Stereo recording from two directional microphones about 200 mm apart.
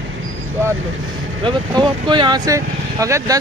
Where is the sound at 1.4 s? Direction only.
25° right (ahead or behind).